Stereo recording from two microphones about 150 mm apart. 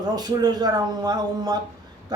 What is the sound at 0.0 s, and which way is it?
A man's voice, 25° right (ahead or behind).